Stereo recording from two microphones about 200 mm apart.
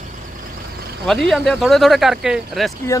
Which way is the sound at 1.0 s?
Centre (ahead or behind).